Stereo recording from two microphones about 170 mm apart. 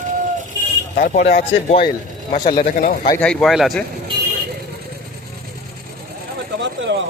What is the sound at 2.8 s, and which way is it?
Speech, 60° left (ahead or behind).